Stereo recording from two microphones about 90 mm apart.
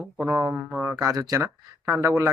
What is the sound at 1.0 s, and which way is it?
Speech, 40° right (ahead or behind).